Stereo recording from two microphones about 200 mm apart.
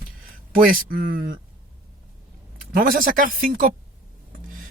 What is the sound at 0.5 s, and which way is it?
Speech, 45° right (ahead or behind).